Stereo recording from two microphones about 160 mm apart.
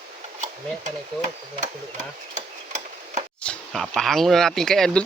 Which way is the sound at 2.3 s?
45° right (ahead or behind).